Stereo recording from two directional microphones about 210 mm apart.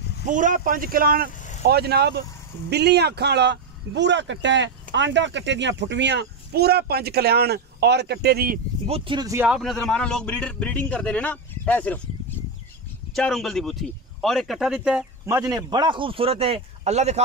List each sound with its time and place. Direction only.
0.3 s speech: 40° right (ahead or behind)
8.8 s a man's voice: 25° right (ahead or behind)
9.5 s a man's voice: centre (ahead or behind)
13.1 s speech: centre (ahead or behind)
15.2 s a man's voice: 15° right (ahead or behind); by 17.2 s 30° right (ahead or behind)